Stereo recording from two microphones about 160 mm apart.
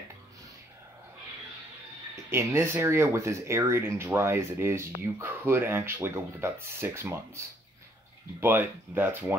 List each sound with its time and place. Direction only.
2.2 s speech: 15° right (ahead or behind)